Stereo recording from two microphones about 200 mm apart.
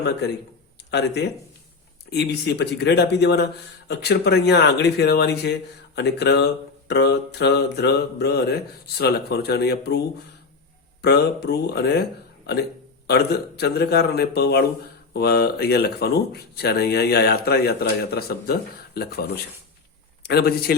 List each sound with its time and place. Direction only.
0.9 s speech: 60° left (ahead or behind)
11.0 s speech: 55° left (ahead or behind)
13.1 s speech: 55° left (ahead or behind)